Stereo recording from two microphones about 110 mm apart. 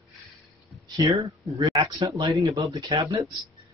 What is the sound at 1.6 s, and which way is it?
A man's voice, 45° right (ahead or behind).